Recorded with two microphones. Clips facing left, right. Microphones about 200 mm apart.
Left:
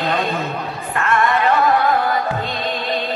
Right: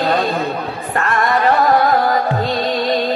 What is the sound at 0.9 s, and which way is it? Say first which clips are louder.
Music: right 1 dB; 40° right (ahead or behind).